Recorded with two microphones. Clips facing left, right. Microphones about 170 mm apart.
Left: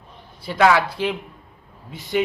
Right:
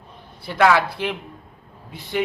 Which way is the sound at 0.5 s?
Centre (ahead or behind).